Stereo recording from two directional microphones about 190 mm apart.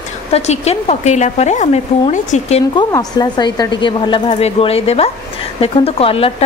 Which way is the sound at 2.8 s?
20° left (ahead or behind).